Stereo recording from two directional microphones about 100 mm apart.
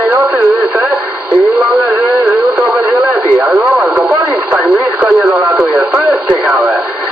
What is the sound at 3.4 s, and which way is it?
Radio, 15° right (ahead or behind).